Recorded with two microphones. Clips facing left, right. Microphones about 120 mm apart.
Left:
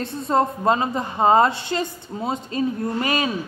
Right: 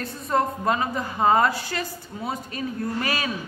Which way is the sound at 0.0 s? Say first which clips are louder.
Left 3 dB; 25° left (ahead or behind).